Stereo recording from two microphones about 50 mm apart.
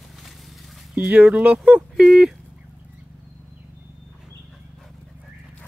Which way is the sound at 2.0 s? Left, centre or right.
Centre.